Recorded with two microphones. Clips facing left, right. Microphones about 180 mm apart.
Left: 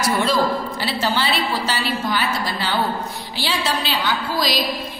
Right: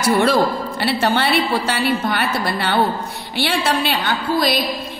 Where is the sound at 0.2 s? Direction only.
65° right (ahead or behind).